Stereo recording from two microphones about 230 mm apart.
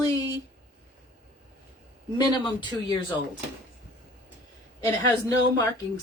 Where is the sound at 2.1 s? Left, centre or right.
Centre.